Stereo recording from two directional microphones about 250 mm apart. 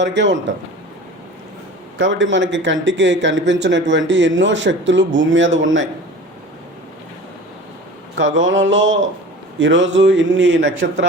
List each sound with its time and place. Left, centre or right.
0.0 s a man's voice: right
2.0 s a man's voice: right
8.1 s a man's voice: right